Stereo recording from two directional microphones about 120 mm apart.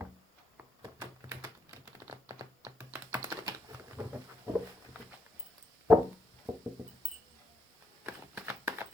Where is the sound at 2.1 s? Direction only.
25° right (ahead or behind).